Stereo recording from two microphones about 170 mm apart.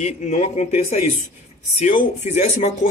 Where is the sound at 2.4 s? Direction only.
45° left (ahead or behind).